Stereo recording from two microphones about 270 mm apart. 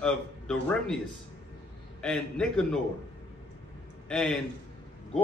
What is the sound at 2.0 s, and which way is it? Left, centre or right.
Speech, centre.